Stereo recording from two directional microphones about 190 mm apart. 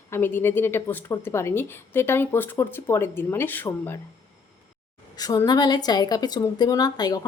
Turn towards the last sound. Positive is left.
turn(degrees=20)  # may be behind; listen again after turning